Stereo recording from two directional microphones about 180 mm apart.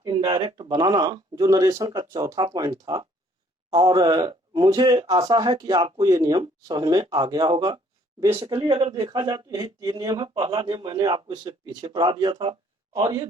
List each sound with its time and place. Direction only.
0.0 s speech: 25° right (ahead or behind)